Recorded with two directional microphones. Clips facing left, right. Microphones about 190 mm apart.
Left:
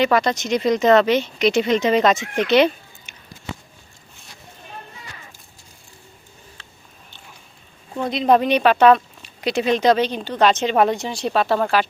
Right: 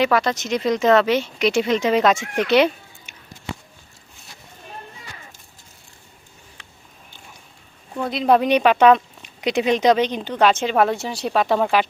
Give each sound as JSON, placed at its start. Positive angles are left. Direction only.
{"t": 0.0, "sound": "speech", "side_deg": -5}
{"t": 6.6, "sound": "a sound", "side_deg": -15}
{"t": 8.1, "sound": "speech", "side_deg": -5}